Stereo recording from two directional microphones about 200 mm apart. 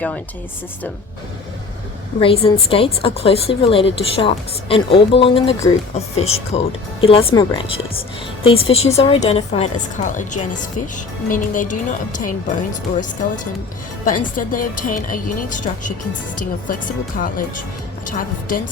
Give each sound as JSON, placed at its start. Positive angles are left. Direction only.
{"t": 2.2, "sound": "a woman's voice", "side_deg": 30}